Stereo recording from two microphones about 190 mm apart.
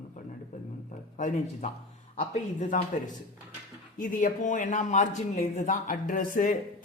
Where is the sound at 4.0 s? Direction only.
45° left (ahead or behind).